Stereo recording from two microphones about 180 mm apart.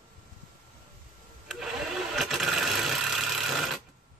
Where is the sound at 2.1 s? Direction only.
Centre (ahead or behind).